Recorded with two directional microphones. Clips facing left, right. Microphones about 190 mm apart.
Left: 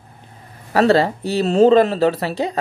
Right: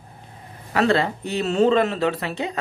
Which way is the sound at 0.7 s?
35° left (ahead or behind).